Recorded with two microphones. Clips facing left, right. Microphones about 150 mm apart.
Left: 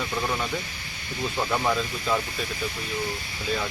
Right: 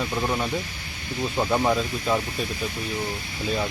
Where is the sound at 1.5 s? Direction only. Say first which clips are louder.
Right 3 dB; 15° right (ahead or behind).